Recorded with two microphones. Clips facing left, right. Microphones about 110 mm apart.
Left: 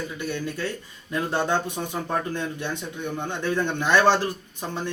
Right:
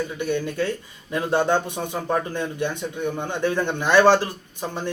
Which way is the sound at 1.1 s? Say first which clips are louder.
Right 4 dB; 15° right (ahead or behind).